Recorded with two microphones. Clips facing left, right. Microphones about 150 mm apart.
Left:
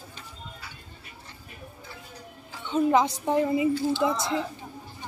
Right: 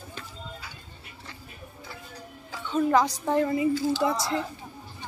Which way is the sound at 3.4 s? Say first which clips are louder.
Left 1 dB; 10° left (ahead or behind).